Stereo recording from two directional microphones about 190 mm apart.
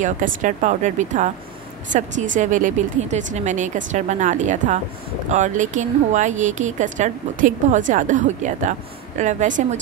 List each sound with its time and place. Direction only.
0.0 s speech: 45° right (ahead or behind)